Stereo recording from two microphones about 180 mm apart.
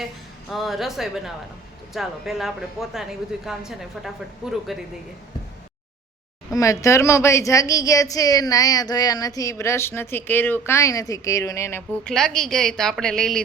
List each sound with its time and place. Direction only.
0.5 s a woman's voice: centre (ahead or behind)
6.5 s a woman's voice: 20° left (ahead or behind)